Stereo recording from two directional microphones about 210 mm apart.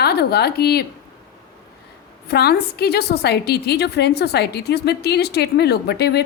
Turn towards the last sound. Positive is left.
turn(degrees=50)  # may be behind; listen again after turning